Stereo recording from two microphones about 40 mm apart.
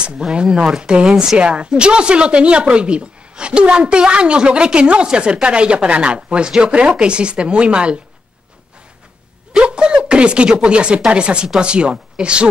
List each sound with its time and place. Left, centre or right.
0.0 s speech: right
1.0 s speech: centre
9.6 s speech: right